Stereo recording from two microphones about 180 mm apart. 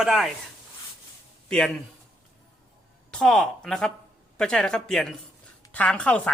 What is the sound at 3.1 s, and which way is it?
A woman's voice, 5° left (ahead or behind).